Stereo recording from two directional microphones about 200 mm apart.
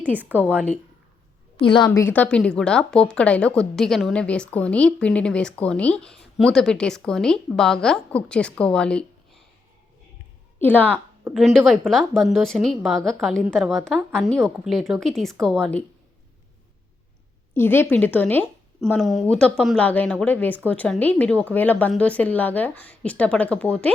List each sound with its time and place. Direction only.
0.0 s a woman's voice: 10° right (ahead or behind)
1.6 s a woman's voice: 25° left (ahead or behind)
1.9 s a woman's voice: 15° left (ahead or behind)
10.6 s a woman's voice: 10° left (ahead or behind)
17.5 s a woman's voice: 10° left (ahead or behind)